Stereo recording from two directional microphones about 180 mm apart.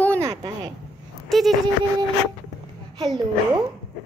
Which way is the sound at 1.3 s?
Centre (ahead or behind).